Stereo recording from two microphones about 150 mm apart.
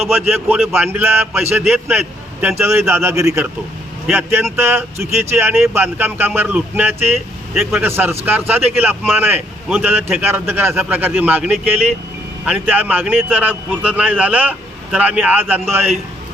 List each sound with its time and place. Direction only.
0.3 s speech: 10° right (ahead or behind)